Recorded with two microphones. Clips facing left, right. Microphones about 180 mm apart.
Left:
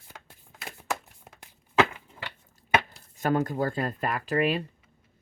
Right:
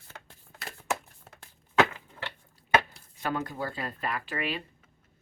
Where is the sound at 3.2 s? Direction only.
45° left (ahead or behind).